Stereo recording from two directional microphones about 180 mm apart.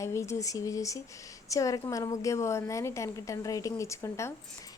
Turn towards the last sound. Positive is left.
turn(degrees=15)  # may be behind; listen again after turning